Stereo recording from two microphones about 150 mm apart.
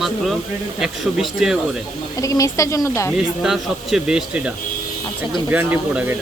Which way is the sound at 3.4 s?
5° right (ahead or behind).